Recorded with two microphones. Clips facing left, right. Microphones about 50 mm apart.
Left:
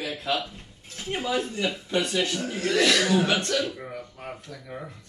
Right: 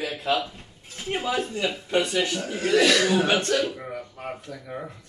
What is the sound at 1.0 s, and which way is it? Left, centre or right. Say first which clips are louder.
Speech: right 1 dB; centre.